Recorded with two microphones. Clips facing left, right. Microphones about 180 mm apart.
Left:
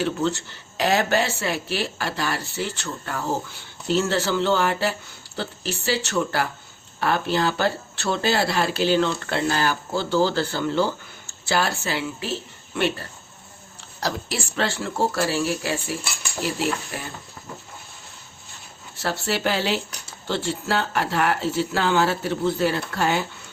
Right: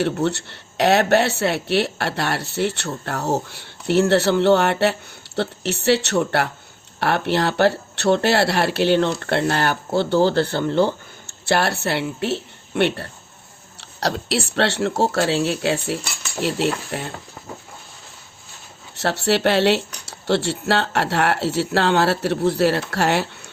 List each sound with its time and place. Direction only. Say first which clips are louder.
0.0 s speech: right 3 dB; 70° right (ahead or behind)
18.9 s speech: right 6 dB; 70° right (ahead or behind)